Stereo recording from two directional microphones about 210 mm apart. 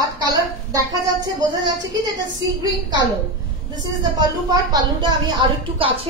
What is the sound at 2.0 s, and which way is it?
Speech, 20° right (ahead or behind).